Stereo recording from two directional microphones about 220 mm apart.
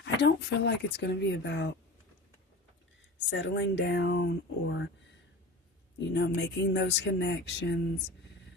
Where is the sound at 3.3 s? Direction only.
55° left (ahead or behind).